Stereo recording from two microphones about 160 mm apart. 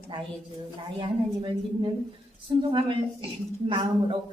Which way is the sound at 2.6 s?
30° right (ahead or behind).